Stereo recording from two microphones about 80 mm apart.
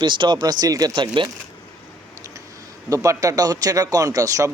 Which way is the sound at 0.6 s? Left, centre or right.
Right.